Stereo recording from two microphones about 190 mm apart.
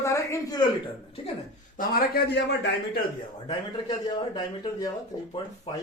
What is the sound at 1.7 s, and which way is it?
A man's voice, 50° left (ahead or behind).